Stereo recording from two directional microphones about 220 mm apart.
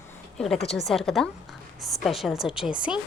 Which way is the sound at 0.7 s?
Centre (ahead or behind).